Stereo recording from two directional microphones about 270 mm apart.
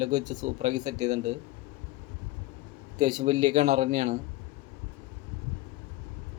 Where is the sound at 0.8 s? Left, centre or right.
Centre.